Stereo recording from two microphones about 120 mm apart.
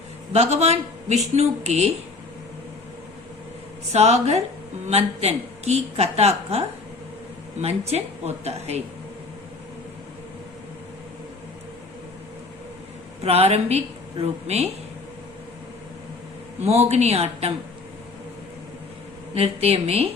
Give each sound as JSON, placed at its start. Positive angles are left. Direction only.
{"t": 0.3, "sound": "a woman's voice", "side_deg": -65}
{"t": 3.9, "sound": "a woman's voice", "side_deg": -60}
{"t": 7.6, "sound": "a woman's voice", "side_deg": -60}
{"t": 13.2, "sound": "a woman's voice", "side_deg": -60}
{"t": 16.6, "sound": "a woman's voice", "side_deg": -65}
{"t": 19.3, "sound": "a woman's voice", "side_deg": -55}